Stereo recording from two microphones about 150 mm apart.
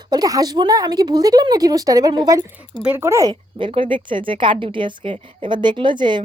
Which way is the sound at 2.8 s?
15° right (ahead or behind).